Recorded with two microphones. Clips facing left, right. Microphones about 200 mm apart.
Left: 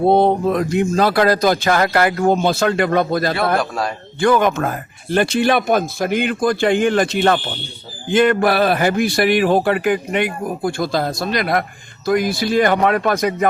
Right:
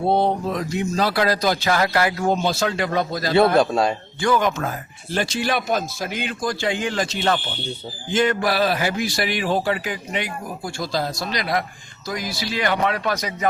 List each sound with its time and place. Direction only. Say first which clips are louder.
0.1 s a man's voice: left 4 dB; 55° left (ahead or behind)
3.3 s a man's voice: right 3 dB; 25° right (ahead or behind)
4.2 s a man's voice: left 5 dB; 55° left (ahead or behind)